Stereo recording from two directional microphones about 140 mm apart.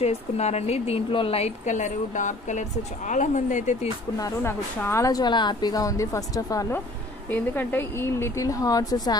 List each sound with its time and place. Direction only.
0.0 s a woman's voice: 50° left (ahead or behind)
4.2 s a woman's voice: 15° left (ahead or behind)
7.2 s a woman's voice: 15° left (ahead or behind)